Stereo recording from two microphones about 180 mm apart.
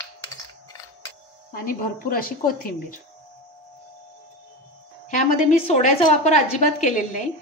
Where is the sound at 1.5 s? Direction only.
55° left (ahead or behind).